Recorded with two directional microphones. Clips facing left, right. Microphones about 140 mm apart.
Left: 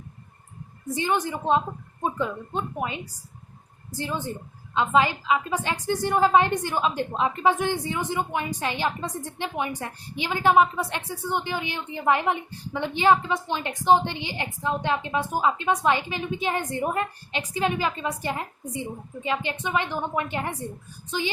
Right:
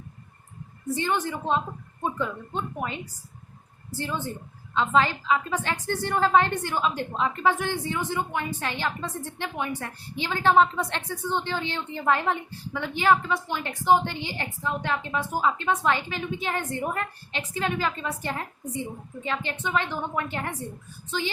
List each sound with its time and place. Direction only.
0.9 s a woman's voice: 15° left (ahead or behind)